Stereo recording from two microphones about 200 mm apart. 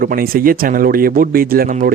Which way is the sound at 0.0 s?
45° right (ahead or behind).